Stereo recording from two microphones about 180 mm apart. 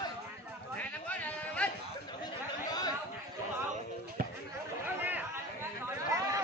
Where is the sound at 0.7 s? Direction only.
10° left (ahead or behind).